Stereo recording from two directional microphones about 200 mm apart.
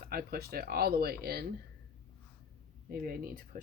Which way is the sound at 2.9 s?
45° right (ahead or behind).